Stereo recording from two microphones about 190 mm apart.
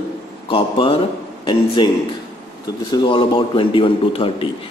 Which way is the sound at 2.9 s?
25° left (ahead or behind).